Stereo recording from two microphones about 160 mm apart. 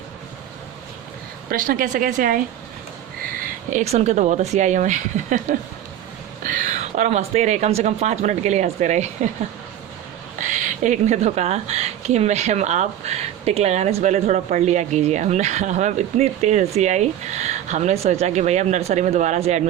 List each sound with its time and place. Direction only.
1.5 s speech: 60° right (ahead or behind)
10.8 s speech: 45° right (ahead or behind)